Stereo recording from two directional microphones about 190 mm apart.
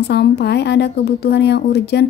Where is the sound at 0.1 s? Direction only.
60° left (ahead or behind).